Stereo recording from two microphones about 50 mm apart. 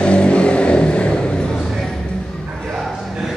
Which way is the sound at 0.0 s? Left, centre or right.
Left.